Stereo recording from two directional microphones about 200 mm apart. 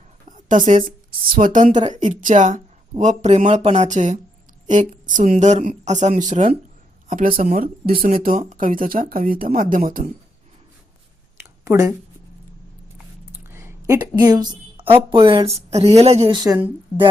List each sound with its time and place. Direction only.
0.3 s a woman's voice: 40° right (ahead or behind)
11.6 s speech: 15° right (ahead or behind)
13.3 s a sound: 10° right (ahead or behind)
14.2 s speech: 20° right (ahead or behind)